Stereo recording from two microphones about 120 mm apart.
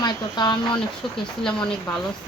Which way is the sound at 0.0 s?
35° left (ahead or behind).